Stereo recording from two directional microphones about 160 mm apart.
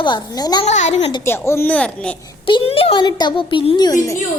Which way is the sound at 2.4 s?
35° left (ahead or behind).